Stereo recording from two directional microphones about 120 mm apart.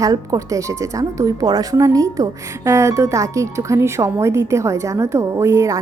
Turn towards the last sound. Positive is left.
turn(degrees=-25)  # may be behind; listen again after turning